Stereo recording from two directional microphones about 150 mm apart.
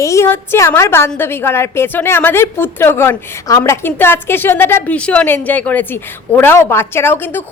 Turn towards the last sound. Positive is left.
turn(degrees=15)  # may be behind; listen again after turning